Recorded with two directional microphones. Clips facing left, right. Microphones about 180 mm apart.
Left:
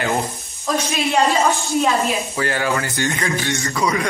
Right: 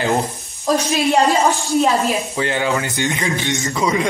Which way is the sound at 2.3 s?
20° right (ahead or behind).